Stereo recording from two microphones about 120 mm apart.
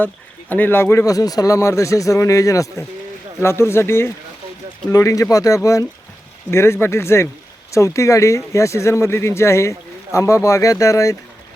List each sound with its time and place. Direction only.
0.5 s speech: 15° left (ahead or behind)